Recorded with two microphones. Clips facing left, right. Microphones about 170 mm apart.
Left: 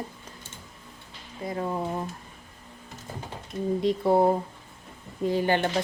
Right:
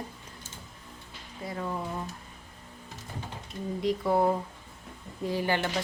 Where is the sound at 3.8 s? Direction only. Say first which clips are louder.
Left 3 dB; 25° left (ahead or behind).